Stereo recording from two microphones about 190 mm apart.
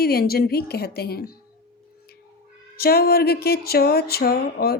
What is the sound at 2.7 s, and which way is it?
Speech, 55° left (ahead or behind).